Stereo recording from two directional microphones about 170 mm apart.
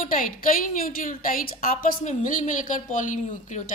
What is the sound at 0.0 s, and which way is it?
A woman's voice, 55° left (ahead or behind).